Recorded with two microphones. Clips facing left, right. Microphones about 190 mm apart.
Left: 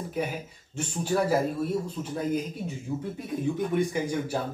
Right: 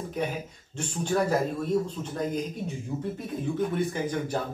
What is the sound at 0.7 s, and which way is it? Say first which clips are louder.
Speech: even; 5° left (ahead or behind).